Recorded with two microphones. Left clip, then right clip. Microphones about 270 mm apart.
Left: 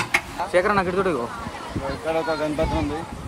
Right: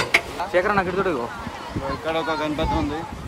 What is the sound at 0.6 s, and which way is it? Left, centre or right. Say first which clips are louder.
Speech: even; left.